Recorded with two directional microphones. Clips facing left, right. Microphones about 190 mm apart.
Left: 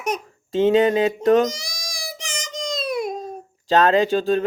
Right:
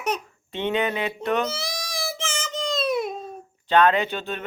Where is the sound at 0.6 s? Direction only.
40° left (ahead or behind).